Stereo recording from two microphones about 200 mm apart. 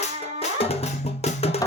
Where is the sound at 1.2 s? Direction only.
30° left (ahead or behind).